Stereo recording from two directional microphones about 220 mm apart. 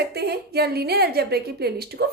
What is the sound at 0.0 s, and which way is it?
A woman's voice, 45° right (ahead or behind).